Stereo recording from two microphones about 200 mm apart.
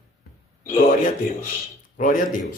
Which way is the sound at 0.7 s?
40° left (ahead or behind).